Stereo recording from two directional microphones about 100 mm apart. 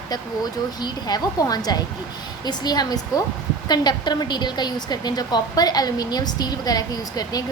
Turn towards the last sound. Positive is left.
turn(degrees=40)  # may be behind; listen again after turning